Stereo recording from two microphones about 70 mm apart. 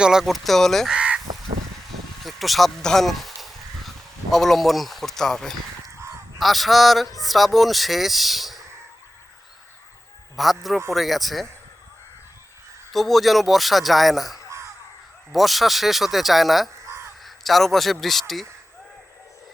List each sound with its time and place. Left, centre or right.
0.0 s a man's voice: centre
0.9 s crow: centre
2.2 s a man's voice: centre
10.3 s a man's voice: centre
12.9 s a man's voice: centre
16.8 s crow: right
17.2 s a man's voice: centre